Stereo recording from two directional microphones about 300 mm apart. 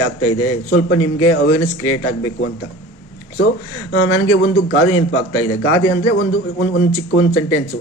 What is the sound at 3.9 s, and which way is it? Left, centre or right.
A man's voice, left.